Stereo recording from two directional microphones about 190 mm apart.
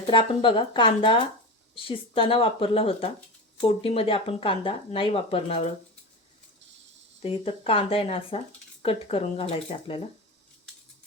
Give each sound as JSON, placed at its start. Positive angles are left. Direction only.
{"t": 0.1, "sound": "speech", "side_deg": 30}
{"t": 7.2, "sound": "speech", "side_deg": 30}